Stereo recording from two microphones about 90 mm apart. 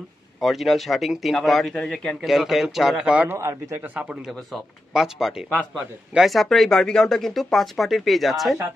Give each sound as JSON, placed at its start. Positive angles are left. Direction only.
{"t": 0.4, "sound": "a man's voice", "side_deg": 0}
{"t": 2.2, "sound": "speech", "side_deg": 0}
{"t": 3.3, "sound": "a man's voice", "side_deg": -30}
{"t": 3.9, "sound": "speech", "side_deg": -15}
{"t": 4.3, "sound": "speech", "side_deg": 0}